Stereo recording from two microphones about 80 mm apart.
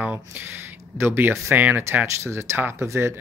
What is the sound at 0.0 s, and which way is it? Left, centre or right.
Speech, right.